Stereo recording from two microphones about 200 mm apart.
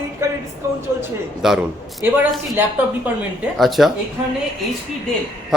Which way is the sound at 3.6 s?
Centre (ahead or behind).